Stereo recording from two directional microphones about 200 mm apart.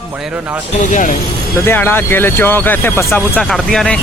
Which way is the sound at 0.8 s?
40° left (ahead or behind).